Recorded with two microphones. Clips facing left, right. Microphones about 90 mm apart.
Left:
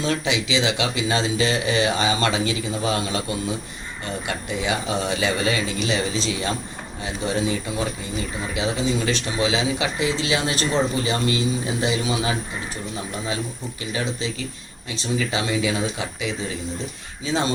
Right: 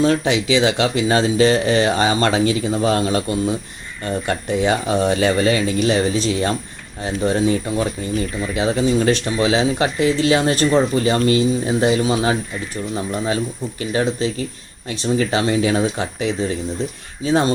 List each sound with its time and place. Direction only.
0.0 s speech: 40° right (ahead or behind)
4.3 s speech: 50° right (ahead or behind)
13.9 s speech: 50° right (ahead or behind)